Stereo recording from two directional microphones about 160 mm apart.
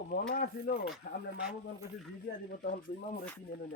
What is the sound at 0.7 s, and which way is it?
Speech, 65° left (ahead or behind).